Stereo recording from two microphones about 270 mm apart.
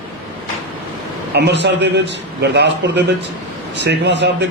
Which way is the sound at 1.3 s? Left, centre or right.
Right.